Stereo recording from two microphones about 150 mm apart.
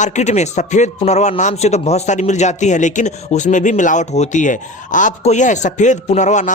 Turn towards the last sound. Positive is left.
turn(degrees=55)  # may be behind; listen again after turning